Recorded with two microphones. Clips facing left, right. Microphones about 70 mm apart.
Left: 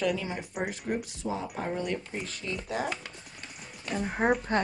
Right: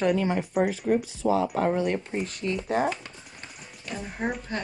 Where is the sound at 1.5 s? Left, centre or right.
Right.